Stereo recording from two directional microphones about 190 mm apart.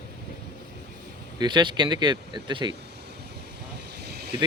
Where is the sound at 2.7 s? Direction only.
60° right (ahead or behind).